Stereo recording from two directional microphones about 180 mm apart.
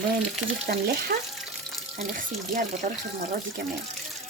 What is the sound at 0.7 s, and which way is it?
Speech, 60° right (ahead or behind).